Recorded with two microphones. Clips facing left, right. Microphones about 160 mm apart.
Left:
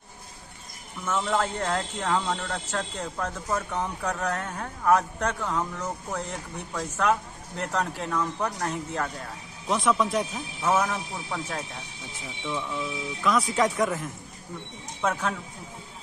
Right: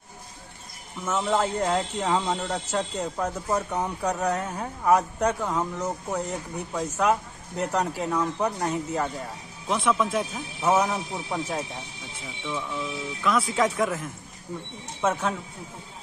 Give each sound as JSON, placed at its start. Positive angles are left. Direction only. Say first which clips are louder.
{"t": 1.0, "sound": "a man's voice", "louder": "right 2 dB", "side_deg": -5}
{"t": 10.6, "sound": "a man's voice", "louder": "right 2 dB", "side_deg": -15}
{"t": 12.2, "sound": "speech", "louder": "even", "side_deg": 0}